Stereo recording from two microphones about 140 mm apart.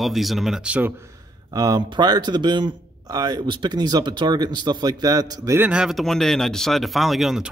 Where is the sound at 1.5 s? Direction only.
30° right (ahead or behind).